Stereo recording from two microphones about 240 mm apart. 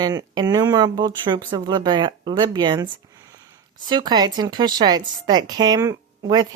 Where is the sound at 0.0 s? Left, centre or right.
Centre.